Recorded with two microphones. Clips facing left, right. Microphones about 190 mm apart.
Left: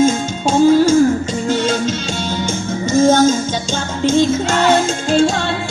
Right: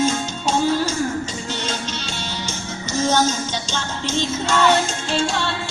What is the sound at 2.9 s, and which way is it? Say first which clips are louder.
Music: left 8 dB; 50° left (ahead or behind).